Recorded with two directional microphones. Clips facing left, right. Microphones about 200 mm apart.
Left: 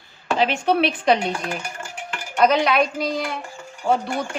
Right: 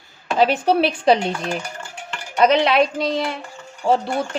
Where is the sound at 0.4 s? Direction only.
40° right (ahead or behind).